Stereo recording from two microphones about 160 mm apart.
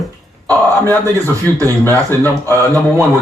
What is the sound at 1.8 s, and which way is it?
Speech, 15° left (ahead or behind).